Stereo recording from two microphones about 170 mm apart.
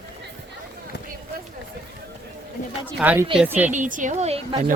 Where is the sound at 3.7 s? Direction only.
50° right (ahead or behind).